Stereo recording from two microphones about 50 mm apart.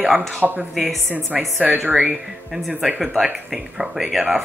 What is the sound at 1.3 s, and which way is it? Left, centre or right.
Speech, right.